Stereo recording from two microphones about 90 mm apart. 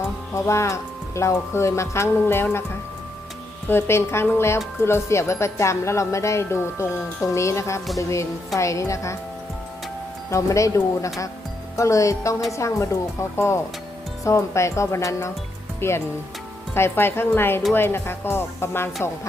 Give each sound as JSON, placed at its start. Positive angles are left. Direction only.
{"t": 0.3, "sound": "speech", "side_deg": 35}
{"t": 3.7, "sound": "speech", "side_deg": 30}
{"t": 10.2, "sound": "speech", "side_deg": 35}